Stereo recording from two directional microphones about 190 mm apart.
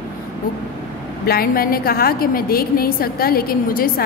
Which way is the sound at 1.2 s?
55° left (ahead or behind).